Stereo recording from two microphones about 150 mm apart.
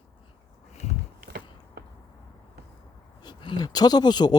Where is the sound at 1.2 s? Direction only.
90° right.